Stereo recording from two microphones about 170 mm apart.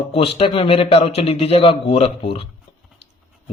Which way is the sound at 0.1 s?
35° left (ahead or behind).